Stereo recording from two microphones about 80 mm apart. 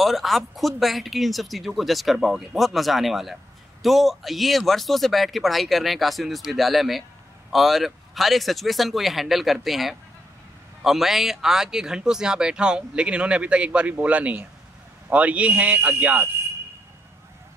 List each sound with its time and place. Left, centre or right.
0.0 s a man's voice: centre; by 16.3 s right